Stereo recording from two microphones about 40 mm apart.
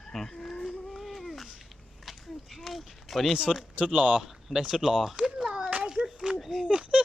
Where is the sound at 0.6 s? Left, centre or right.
Centre.